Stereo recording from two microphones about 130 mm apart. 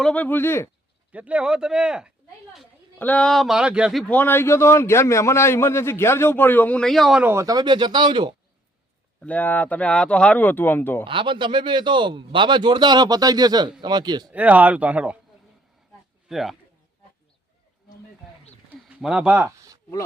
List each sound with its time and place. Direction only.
0.0 s speech: 10° left (ahead or behind)
1.1 s speech: 10° right (ahead or behind)
3.0 s speech: 10° left (ahead or behind); by 4.0 s 5° right (ahead or behind)
4.0 s a man's voice: 15° left (ahead or behind)
7.2 s a man's voice: 20° right (ahead or behind); by 8.4 s 35° right (ahead or behind)
9.2 s speech: 10° left (ahead or behind)
11.0 s a man's voice: 40° right (ahead or behind)
14.3 s speech: 10° right (ahead or behind)
16.3 s speech: centre (ahead or behind)
18.7 s a sound: 5° right (ahead or behind)
19.5 s a sound: 25° right (ahead or behind)